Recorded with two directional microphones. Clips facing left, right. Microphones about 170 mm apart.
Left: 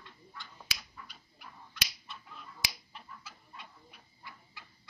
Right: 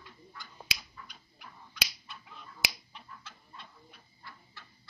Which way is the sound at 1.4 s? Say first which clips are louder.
Right 3 dB; centre (ahead or behind).